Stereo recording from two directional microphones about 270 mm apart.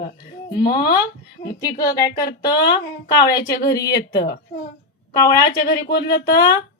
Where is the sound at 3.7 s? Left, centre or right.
Centre.